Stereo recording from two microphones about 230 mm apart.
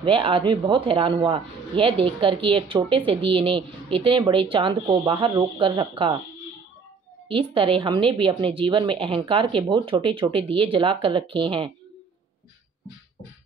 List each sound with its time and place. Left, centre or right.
0.0 s a woman's voice: right
7.2 s a woman's voice: right